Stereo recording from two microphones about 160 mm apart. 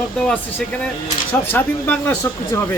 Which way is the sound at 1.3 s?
10° left (ahead or behind).